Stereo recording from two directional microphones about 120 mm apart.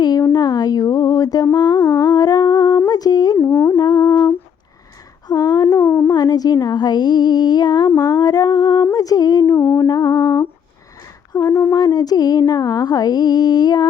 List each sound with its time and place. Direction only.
0.0 s a sound: 35° left (ahead or behind)
1.5 s humming: 35° left (ahead or behind)
3.3 s music: 20° left (ahead or behind)
3.8 s humming: 35° left (ahead or behind)
5.3 s a sound: 30° left (ahead or behind)
5.8 s a sound: 15° left (ahead or behind)
6.1 s speech: 35° left (ahead or behind)
9.9 s mantra: 35° left (ahead or behind)
11.3 s speech: 30° left (ahead or behind)